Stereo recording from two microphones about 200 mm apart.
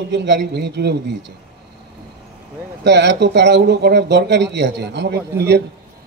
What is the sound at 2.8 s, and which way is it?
Speech, 60° right (ahead or behind).